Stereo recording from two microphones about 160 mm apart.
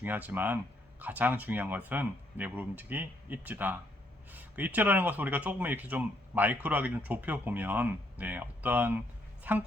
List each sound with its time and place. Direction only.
0.0 s speech: 10° right (ahead or behind)